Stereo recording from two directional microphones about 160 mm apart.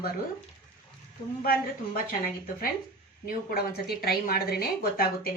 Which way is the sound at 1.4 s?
65° left (ahead or behind).